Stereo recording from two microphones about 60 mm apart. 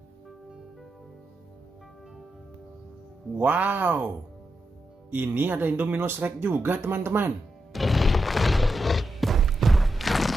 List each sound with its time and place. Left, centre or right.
3.3 s speech: right
5.1 s speech: right
7.7 s music: centre